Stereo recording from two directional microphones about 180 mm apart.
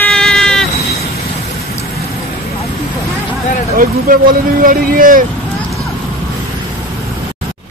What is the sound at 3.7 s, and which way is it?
Speech, 50° right (ahead or behind).